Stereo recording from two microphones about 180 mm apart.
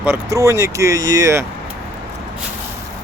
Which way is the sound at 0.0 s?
15° right (ahead or behind).